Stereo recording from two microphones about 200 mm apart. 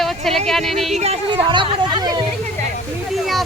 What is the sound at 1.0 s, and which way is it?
Speech, 30° right (ahead or behind).